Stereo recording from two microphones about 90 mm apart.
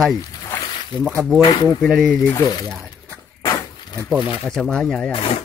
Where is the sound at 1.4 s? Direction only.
45° left (ahead or behind).